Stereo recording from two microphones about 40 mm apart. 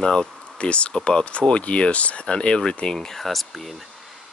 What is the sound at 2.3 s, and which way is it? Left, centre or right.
Speech, left.